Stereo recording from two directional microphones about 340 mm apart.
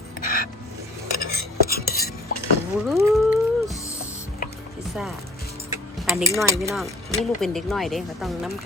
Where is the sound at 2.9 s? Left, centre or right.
Centre.